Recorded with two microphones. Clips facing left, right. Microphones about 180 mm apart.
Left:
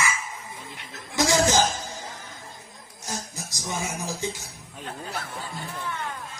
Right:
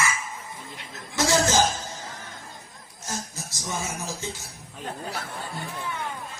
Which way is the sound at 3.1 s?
15° left (ahead or behind).